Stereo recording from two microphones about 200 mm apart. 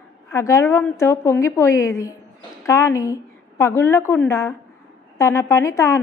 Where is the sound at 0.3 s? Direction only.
15° left (ahead or behind).